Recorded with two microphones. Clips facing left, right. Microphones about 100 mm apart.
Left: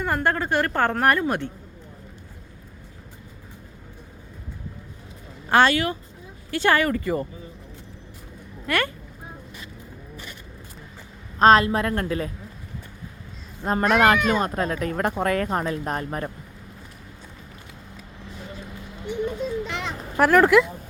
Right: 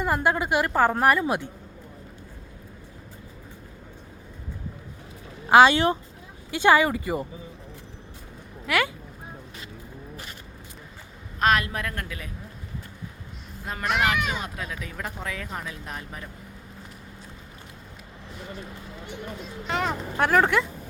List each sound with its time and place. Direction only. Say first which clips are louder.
0.0 s a woman's voice: even; 10° right (ahead or behind)
5.5 s speech: right 3 dB; 10° right (ahead or behind)
5.7 s speech: right 2 dB; 25° right (ahead or behind)
6.5 s a woman's voice: right 1 dB; 15° right (ahead or behind)
8.6 s speech: even; 5° right (ahead or behind)
11.3 s a woman's voice: left 7 dB; 30° left (ahead or behind)
13.7 s speech: left 7 dB; 40° left (ahead or behind)
19.6 s a sound: right 4 dB; 40° right (ahead or behind)
20.1 s speech: left 5 dB; centre (ahead or behind)